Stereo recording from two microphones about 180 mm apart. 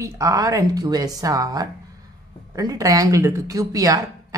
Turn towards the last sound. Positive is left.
turn(degrees=-20)  # may be behind; listen again after turning